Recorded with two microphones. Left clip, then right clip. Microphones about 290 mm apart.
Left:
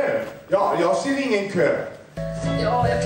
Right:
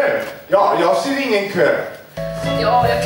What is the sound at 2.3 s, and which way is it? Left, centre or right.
Music, right.